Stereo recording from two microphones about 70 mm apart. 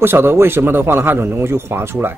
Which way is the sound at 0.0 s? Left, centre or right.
Right.